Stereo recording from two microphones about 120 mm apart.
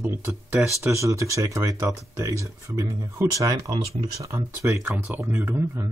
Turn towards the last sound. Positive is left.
turn(degrees=-20)  # may be behind; listen again after turning